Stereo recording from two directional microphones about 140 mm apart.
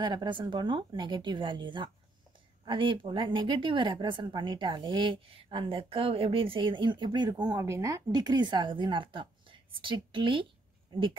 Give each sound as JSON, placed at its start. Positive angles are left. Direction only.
{"t": 0.0, "sound": "a woman's voice", "side_deg": -30}